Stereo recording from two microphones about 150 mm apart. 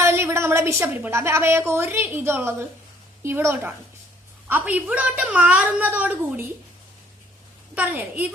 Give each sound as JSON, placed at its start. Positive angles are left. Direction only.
{"t": 0.0, "sound": "a woman's voice", "side_deg": -15}
{"t": 7.8, "sound": "a woman's voice", "side_deg": -10}